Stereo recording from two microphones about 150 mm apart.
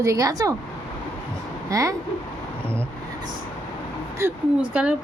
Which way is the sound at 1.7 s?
20° right (ahead or behind).